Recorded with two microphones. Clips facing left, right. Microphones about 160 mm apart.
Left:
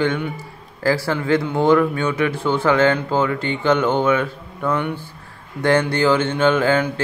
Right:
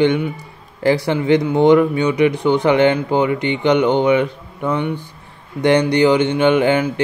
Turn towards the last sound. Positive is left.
turn(degrees=-15)  # may be behind; listen again after turning